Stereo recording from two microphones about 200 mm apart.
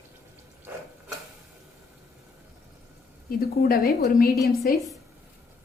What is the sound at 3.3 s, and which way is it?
Speech, 50° left (ahead or behind).